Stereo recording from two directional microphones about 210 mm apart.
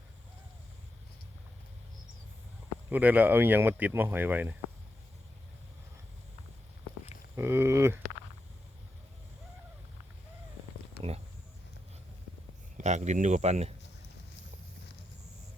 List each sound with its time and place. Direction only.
2.9 s speech: 10° right (ahead or behind)
7.3 s a sound: 10° right (ahead or behind)
12.7 s speech: 35° right (ahead or behind)